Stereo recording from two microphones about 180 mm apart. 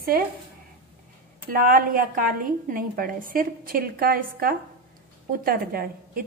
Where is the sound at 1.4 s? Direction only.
50° right (ahead or behind).